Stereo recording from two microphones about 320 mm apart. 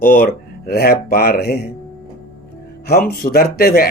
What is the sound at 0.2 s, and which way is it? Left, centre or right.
Speech, left.